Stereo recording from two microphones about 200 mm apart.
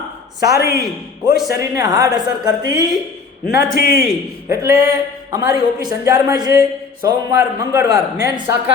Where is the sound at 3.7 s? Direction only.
45° left (ahead or behind).